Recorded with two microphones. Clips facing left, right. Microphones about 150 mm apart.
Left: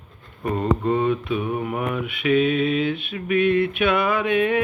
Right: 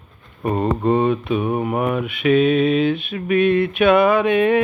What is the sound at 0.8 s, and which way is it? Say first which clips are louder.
Mantra: right 4 dB; 30° right (ahead or behind).